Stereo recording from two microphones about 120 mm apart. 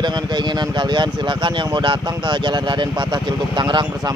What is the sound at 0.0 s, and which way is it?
Speech, 40° right (ahead or behind).